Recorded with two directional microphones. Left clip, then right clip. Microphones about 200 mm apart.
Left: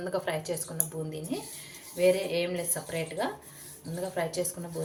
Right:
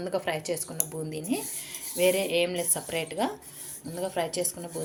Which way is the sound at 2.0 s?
40° right (ahead or behind).